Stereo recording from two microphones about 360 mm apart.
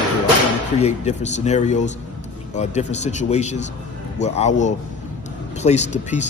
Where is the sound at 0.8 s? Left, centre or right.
Centre.